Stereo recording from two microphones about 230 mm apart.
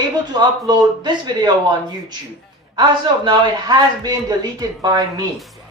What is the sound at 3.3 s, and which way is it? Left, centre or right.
A man's voice, centre.